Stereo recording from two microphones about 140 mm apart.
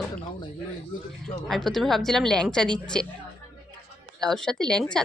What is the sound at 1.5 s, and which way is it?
A woman's voice, 5° left (ahead or behind).